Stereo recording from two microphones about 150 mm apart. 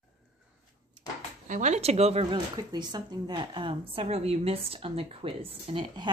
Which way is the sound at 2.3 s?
30° right (ahead or behind).